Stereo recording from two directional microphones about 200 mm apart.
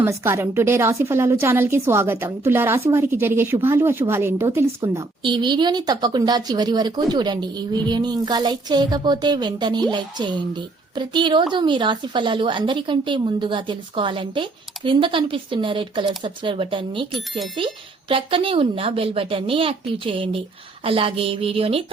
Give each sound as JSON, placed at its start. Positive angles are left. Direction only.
{"t": 0.0, "sound": "a woman's voice", "side_deg": -15}